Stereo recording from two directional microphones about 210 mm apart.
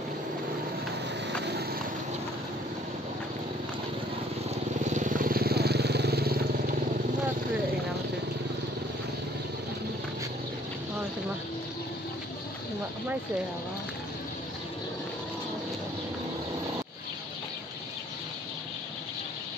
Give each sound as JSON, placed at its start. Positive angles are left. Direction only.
{"t": 1.4, "sound": "vehicle", "side_deg": -50}
{"t": 4.8, "sound": "vehicle", "side_deg": -35}